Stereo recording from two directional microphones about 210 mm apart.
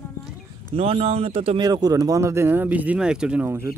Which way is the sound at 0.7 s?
30° right (ahead or behind).